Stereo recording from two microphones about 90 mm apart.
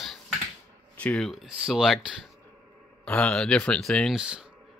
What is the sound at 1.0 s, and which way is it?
Speech, 10° left (ahead or behind).